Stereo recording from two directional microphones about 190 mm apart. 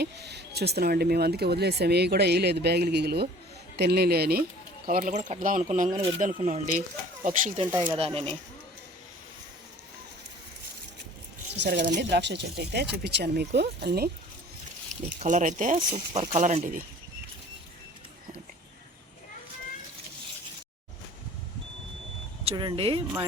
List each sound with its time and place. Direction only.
0.0 s speech: 60° right (ahead or behind); by 7.6 s 40° right (ahead or behind)
7.9 s speech: 30° right (ahead or behind)
11.6 s speech: 60° right (ahead or behind)
15.2 s speech: 40° right (ahead or behind)
22.4 s speech: 25° right (ahead or behind)